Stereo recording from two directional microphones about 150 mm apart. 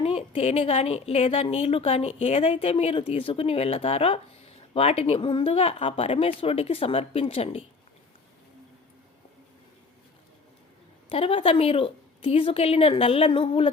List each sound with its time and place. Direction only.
0.0 s a woman's voice: 40° left (ahead or behind)
11.1 s a woman's voice: 40° left (ahead or behind)